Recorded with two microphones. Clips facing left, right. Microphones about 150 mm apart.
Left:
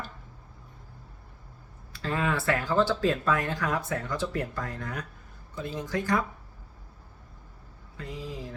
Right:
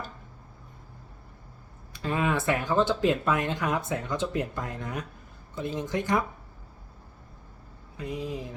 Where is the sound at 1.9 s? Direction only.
15° right (ahead or behind).